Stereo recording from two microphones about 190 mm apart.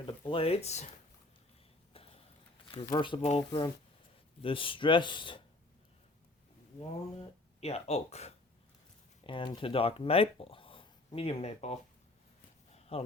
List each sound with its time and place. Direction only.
0.0 s speech: 25° left (ahead or behind)
1.9 s a sound: 30° left (ahead or behind)
2.9 s speech: 25° left (ahead or behind)
7.6 s speech: 35° left (ahead or behind)
12.9 s speech: 30° left (ahead or behind)